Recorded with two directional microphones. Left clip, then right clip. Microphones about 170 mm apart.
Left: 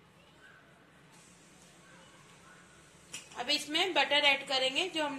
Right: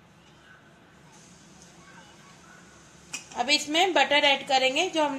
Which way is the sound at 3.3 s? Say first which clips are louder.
Right 8 dB; 60° right (ahead or behind).